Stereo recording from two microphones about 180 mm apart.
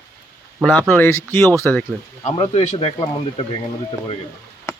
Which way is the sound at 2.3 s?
35° left (ahead or behind).